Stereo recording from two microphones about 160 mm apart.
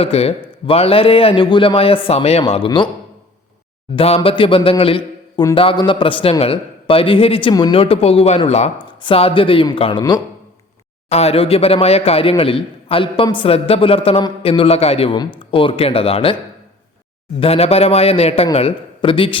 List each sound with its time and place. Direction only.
0.0 s a man's voice: 40° left (ahead or behind)
3.9 s a man's voice: 35° left (ahead or behind)
11.1 s a man's voice: 40° left (ahead or behind)
17.4 s a man's voice: 40° left (ahead or behind)